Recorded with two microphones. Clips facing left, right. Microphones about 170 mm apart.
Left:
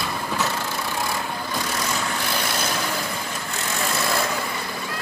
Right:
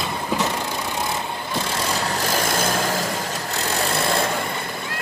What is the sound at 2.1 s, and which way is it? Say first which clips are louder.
Vehicle: right 4 dB; 45° right (ahead or behind).